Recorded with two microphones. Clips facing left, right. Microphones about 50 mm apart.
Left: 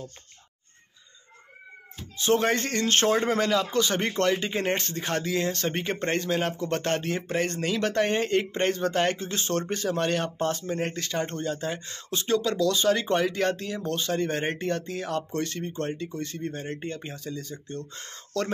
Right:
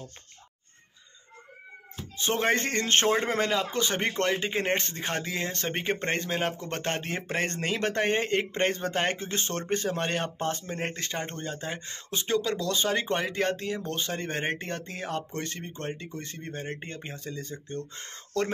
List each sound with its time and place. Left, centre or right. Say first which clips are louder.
2.1 s a man's voice: left 3 dB; right
12.5 s a man's voice: left 4 dB; right